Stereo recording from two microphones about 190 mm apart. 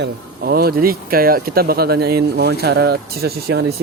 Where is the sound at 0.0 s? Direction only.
55° right (ahead or behind).